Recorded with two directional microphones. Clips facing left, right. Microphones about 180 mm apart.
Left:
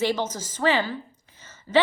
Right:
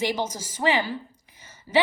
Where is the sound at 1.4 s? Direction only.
10° right (ahead or behind).